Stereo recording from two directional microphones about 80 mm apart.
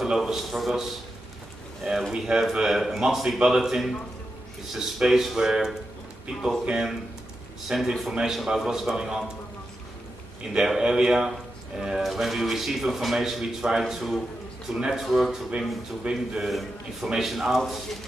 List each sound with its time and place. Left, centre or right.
0.0 s speech: centre
1.9 s speech: centre
10.5 s speech: centre